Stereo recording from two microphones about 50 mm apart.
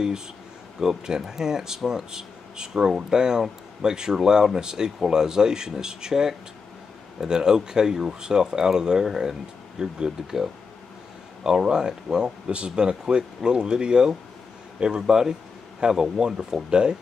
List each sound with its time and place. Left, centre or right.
0.7 s speech: centre